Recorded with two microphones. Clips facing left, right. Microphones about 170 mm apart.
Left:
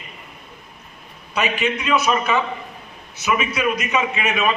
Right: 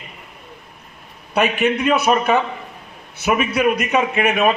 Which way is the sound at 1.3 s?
55° right (ahead or behind).